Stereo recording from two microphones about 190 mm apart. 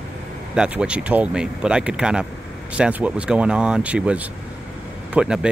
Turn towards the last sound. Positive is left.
turn(degrees=-5)  # may be behind; listen again after turning